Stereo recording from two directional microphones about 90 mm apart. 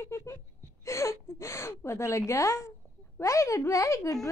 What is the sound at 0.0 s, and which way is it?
Wail, 35° left (ahead or behind).